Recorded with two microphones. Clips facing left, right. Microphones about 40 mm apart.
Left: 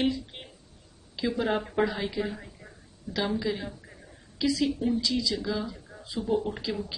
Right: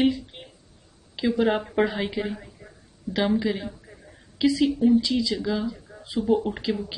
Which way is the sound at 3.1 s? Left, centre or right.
Right.